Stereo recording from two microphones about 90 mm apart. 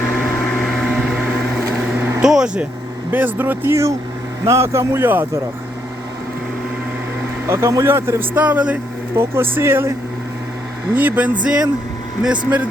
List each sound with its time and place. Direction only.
2.2 s speech: 10° right (ahead or behind)
3.1 s a man's voice: 20° right (ahead or behind)
7.4 s speech: 35° right (ahead or behind)
10.9 s speech: 20° right (ahead or behind)